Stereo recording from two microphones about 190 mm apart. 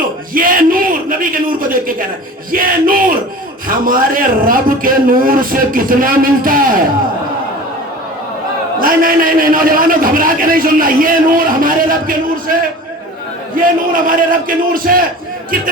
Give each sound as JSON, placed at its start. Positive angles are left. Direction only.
{"t": 0.3, "sound": "a man's voice", "side_deg": -45}
{"t": 8.8, "sound": "a man's voice", "side_deg": -50}
{"t": 13.6, "sound": "a man's voice", "side_deg": -45}